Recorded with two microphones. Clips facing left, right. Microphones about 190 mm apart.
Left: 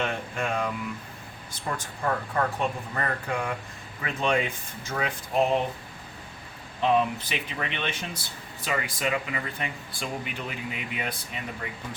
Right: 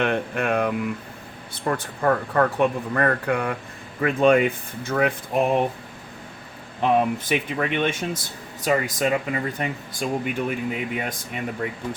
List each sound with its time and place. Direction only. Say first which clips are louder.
0.0 s speech: right 6 dB; 60° right (ahead or behind)
6.8 s speech: right 3 dB; 55° right (ahead or behind)